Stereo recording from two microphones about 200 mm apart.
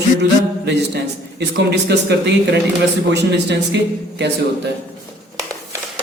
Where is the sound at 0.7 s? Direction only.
55° right (ahead or behind).